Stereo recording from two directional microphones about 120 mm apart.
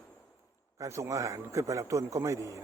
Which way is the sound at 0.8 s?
25° right (ahead or behind).